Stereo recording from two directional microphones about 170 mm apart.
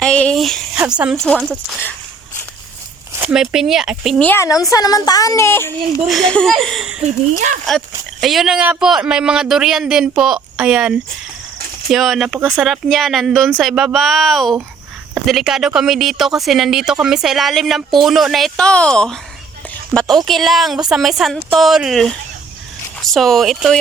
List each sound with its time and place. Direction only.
0.0 s a sound: 5° left (ahead or behind)
0.8 s speech: 5° right (ahead or behind)
3.2 s speech: 5° right (ahead or behind)
4.3 s a woman's voice: 20° left (ahead or behind)
6.1 s speech: centre (ahead or behind)
8.2 s speech: centre (ahead or behind)